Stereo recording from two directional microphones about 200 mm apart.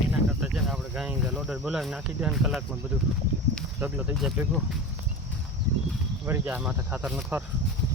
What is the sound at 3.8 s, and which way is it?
Speech, 10° right (ahead or behind).